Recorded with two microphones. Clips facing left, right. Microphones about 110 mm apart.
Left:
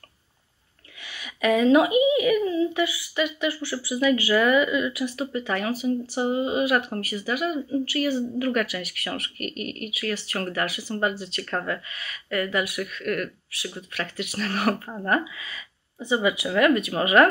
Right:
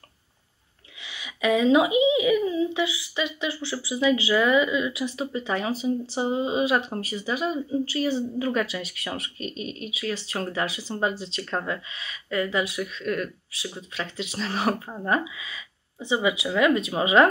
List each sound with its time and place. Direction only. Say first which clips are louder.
1.2 s speech: left 1 dB; 15° right (ahead or behind)
9.4 s speech: left 1 dB; 65° left (ahead or behind)
10.3 s speech: even; 20° right (ahead or behind)